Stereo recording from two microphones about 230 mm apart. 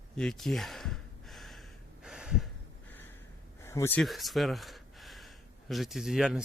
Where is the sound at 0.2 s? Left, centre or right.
Centre.